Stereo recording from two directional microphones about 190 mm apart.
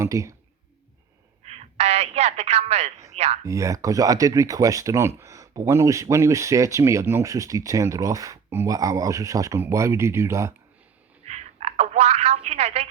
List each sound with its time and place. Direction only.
0.0 s speech: 15° right (ahead or behind)
1.5 s a man's voice: 35° right (ahead or behind)
3.4 s speech: 15° right (ahead or behind)
11.3 s telephone: 35° right (ahead or behind)